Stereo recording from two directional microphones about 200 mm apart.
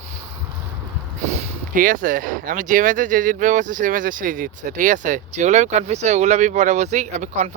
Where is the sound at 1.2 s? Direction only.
40° right (ahead or behind).